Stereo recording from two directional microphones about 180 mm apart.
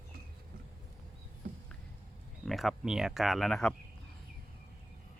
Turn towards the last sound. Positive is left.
turn(degrees=5)  # may be behind; listen again after turning